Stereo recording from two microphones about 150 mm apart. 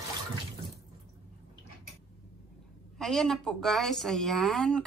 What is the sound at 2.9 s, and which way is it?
A woman's voice, centre (ahead or behind).